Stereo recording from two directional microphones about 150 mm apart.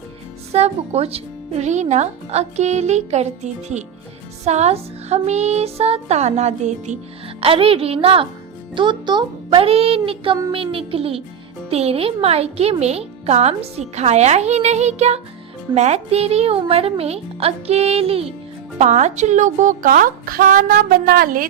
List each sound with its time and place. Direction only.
0.5 s speech: 45° right (ahead or behind)
7.4 s a woman's voice: 40° right (ahead or behind)
18.8 s a woman's voice: 50° right (ahead or behind); by 21.4 s 80° right